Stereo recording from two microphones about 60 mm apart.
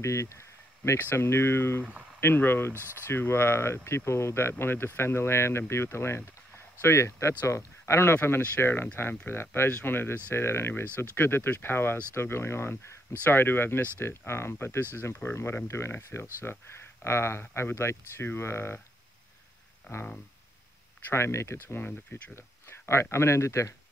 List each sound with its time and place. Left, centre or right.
0.0 s a sound: left
0.9 s speech: left
19.9 s speech: left
21.1 s speech: left
21.6 s speech: left